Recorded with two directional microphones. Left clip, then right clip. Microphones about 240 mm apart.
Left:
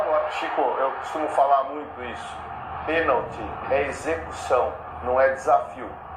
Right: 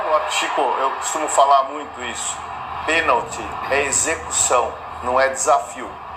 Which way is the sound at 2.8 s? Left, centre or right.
Right.